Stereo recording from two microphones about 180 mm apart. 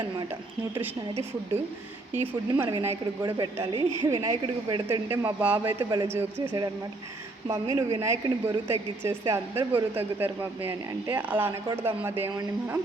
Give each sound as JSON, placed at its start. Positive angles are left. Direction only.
{"t": 2.6, "sound": "a woman's voice", "side_deg": -15}
{"t": 5.9, "sound": "a woman's voice", "side_deg": -20}
{"t": 7.4, "sound": "a woman's voice", "side_deg": -20}